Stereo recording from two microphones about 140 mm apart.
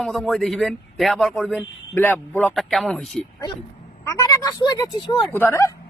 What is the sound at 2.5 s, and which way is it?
Speech, centre (ahead or behind).